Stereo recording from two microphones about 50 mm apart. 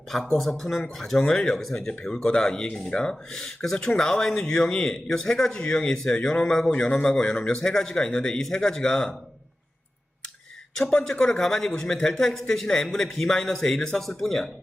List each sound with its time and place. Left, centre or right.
0.1 s a man's voice: centre
1.9 s a man's voice: left
10.8 s a man's voice: centre